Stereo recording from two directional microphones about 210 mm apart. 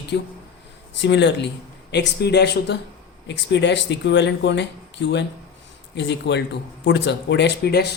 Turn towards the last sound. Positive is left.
turn(degrees=50)  # may be behind; listen again after turning